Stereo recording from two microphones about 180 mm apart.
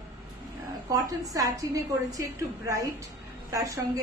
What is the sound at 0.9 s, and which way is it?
A woman's voice, 20° right (ahead or behind).